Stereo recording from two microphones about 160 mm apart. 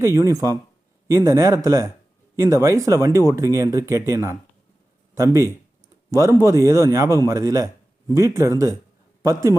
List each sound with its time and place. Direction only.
0.0 s speech: 20° right (ahead or behind)